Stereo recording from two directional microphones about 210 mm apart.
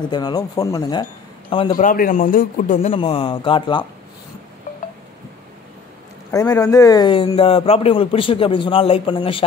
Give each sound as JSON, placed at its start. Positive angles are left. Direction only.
{"t": 0.1, "sound": "speech", "side_deg": 20}
{"t": 1.8, "sound": "speech", "side_deg": 40}
{"t": 6.3, "sound": "speech", "side_deg": 15}